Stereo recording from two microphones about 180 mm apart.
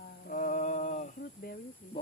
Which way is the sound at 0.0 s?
50° left (ahead or behind).